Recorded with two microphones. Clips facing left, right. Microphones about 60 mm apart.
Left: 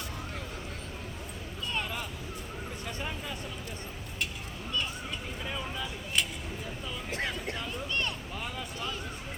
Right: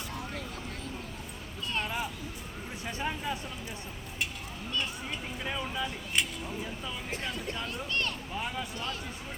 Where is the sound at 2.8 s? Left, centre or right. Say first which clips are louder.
Right 6 dB; centre.